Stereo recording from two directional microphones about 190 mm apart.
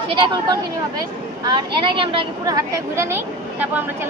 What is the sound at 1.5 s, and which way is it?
Speech, 25° right (ahead or behind).